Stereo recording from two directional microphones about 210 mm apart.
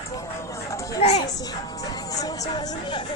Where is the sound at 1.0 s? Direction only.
30° left (ahead or behind).